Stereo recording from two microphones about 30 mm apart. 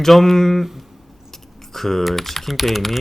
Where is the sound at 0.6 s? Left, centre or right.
Centre.